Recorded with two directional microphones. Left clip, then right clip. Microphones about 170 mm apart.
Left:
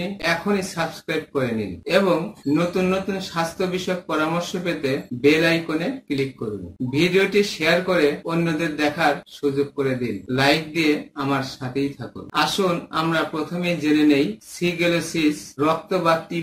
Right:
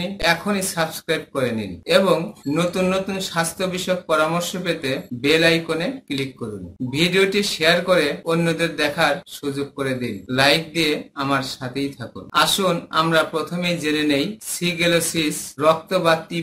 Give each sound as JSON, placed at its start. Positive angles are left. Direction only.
{"t": 0.0, "sound": "speech", "side_deg": -25}